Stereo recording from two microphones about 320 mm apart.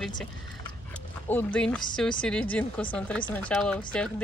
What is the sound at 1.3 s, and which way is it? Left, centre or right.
Speech, centre.